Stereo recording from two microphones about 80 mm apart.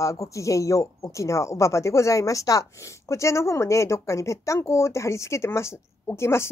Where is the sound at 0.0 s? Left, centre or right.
Left.